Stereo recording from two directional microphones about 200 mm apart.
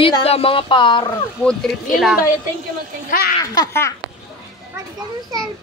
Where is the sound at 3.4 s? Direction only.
15° left (ahead or behind).